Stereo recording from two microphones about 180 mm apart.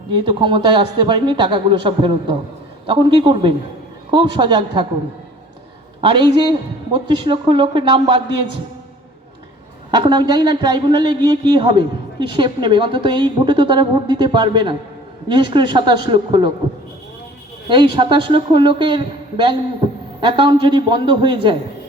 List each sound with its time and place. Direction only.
0.1 s a woman's voice: 25° right (ahead or behind)
6.0 s a woman's voice: 25° right (ahead or behind)
9.9 s a woman's voice: 25° right (ahead or behind)
17.7 s a woman's voice: 25° right (ahead or behind)